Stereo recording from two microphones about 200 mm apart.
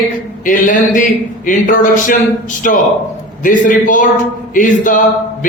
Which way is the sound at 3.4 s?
40° left (ahead or behind).